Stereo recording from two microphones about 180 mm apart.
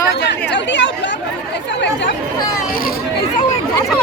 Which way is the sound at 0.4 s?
80° left.